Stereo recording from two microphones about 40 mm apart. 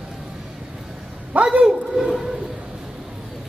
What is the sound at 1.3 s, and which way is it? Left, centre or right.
Speech, right.